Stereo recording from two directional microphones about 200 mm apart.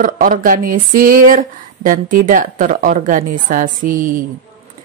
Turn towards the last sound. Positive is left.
turn(degrees=-40)  # may be behind; listen again after turning